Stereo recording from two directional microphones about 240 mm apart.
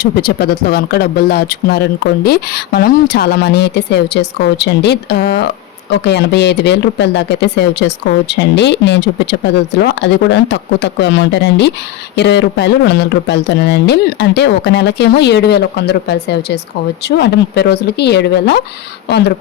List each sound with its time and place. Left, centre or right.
0.0 s speech: left